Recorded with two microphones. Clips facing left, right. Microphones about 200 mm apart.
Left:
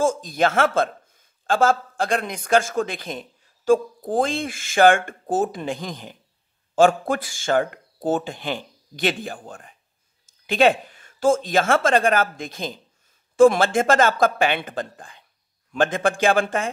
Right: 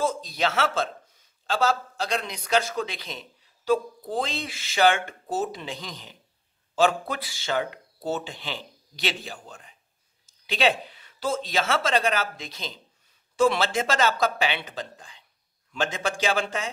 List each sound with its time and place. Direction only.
0.0 s speech: 50° left (ahead or behind)